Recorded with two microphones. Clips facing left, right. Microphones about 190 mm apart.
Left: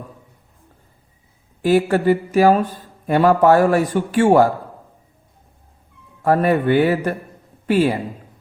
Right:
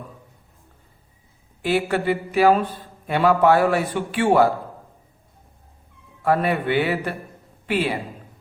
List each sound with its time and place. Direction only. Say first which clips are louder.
1.6 s speech: left 6 dB; 40° left (ahead or behind)
6.2 s a man's voice: left 5 dB; 45° left (ahead or behind)